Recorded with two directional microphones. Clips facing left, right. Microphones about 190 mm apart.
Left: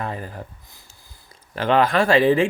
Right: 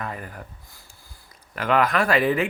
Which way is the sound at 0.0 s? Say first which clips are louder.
Left 4 dB; 30° left (ahead or behind).